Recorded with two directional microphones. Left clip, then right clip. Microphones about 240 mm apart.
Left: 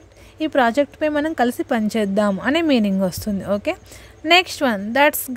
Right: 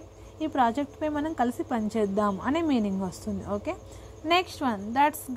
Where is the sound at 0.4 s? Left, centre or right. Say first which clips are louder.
Left 8 dB; left.